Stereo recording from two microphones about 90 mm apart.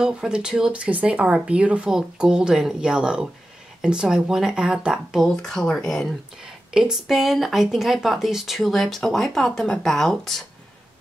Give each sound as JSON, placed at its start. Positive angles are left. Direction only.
{"t": 0.0, "sound": "speech", "side_deg": -10}
{"t": 5.3, "sound": "speech", "side_deg": 5}